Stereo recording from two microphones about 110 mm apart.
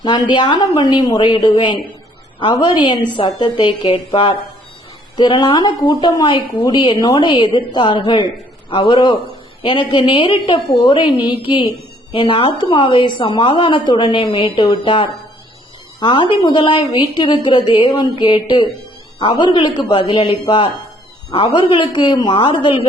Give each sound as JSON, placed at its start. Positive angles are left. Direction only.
{"t": 0.0, "sound": "a woman's voice", "side_deg": 45}